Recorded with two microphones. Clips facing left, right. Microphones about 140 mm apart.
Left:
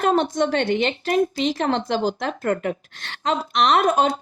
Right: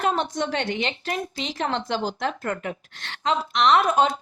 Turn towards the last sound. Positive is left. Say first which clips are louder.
# left 1 dB
turn(degrees=50)  # may be behind; listen again after turning